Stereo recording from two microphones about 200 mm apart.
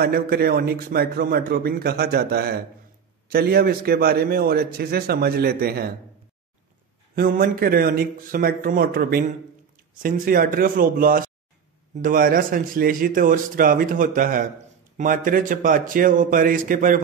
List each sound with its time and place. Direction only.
0.0 s a man's voice: 50° right (ahead or behind)
7.2 s a man's voice: 45° right (ahead or behind)